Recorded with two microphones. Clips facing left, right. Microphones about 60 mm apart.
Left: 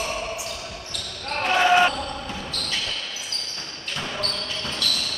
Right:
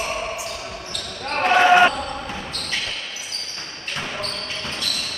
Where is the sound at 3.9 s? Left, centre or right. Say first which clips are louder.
Right 1 dB; right.